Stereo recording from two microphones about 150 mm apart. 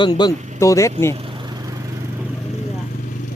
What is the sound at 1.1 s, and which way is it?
Vehicle, 35° right (ahead or behind).